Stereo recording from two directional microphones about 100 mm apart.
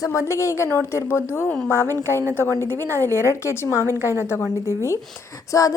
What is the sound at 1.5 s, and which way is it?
Speech, 10° left (ahead or behind).